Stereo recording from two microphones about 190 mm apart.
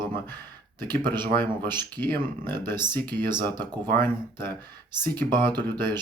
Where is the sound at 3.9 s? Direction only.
10° left (ahead or behind).